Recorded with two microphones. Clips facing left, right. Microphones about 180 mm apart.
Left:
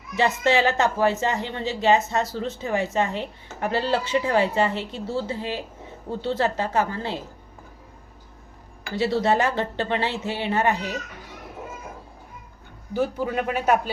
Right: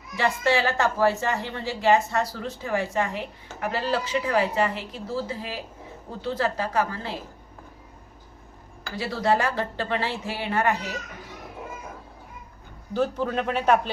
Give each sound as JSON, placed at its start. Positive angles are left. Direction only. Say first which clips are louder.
{"t": 0.2, "sound": "a woman's voice", "louder": "left 3 dB", "side_deg": 20}
{"t": 8.8, "sound": "a woman's voice", "louder": "left 5 dB", "side_deg": 25}
{"t": 12.9, "sound": "a man's voice", "louder": "even", "side_deg": 10}